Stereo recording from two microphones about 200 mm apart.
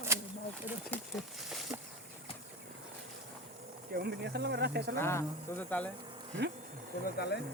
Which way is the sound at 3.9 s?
55° right (ahead or behind).